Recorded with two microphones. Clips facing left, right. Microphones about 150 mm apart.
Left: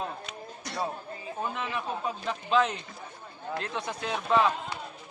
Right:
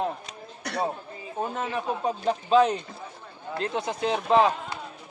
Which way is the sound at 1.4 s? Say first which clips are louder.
Right 4 dB; 45° right (ahead or behind).